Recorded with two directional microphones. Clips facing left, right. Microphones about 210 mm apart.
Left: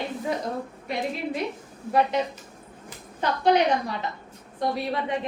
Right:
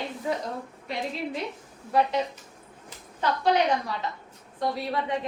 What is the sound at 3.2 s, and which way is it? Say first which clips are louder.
A woman's voice: left 2 dB; 20° left (ahead or behind).